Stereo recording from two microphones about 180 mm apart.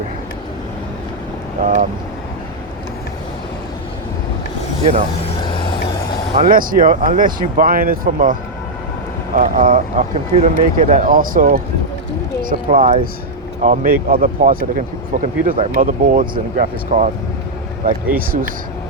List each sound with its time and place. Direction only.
1.6 s speech: 45° right (ahead or behind)
4.8 s speech: 40° right (ahead or behind)
5.2 s vehicle: 25° left (ahead or behind)
6.3 s speech: 50° right (ahead or behind)
15.8 s speech: 50° right (ahead or behind)